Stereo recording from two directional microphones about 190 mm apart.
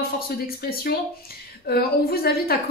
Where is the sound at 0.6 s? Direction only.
55° left (ahead or behind).